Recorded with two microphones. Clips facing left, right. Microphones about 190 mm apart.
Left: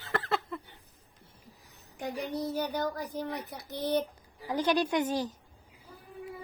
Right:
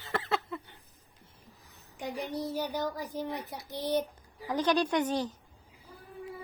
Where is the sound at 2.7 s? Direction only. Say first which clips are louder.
Left 1 dB; 55° left (ahead or behind).